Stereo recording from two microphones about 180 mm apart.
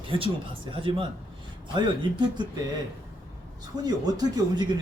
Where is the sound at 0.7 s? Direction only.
30° right (ahead or behind).